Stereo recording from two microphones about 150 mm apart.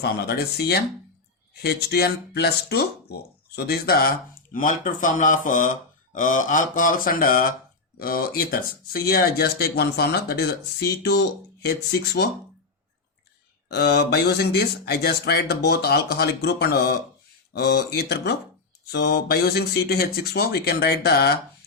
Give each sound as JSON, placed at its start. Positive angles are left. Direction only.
{"t": 0.0, "sound": "speech", "side_deg": 90}
{"t": 1.9, "sound": "speech", "side_deg": 90}
{"t": 6.1, "sound": "a sound", "side_deg": 60}
{"t": 7.9, "sound": "speech", "side_deg": 80}
{"t": 13.7, "sound": "speech", "side_deg": 90}